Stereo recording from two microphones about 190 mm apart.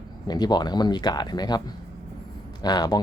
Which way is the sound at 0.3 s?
20° left (ahead or behind).